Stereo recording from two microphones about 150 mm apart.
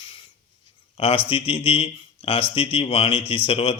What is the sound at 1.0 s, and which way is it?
A man's voice, 40° left (ahead or behind).